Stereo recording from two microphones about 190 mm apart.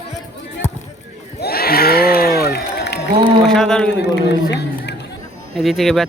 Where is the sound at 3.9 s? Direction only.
65° left (ahead or behind).